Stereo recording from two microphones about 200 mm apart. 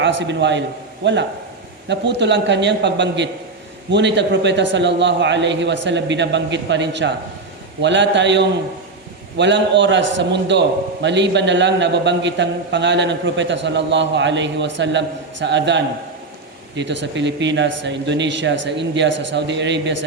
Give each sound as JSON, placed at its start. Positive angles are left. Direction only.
{"t": 0.0, "sound": "a man's voice", "side_deg": -65}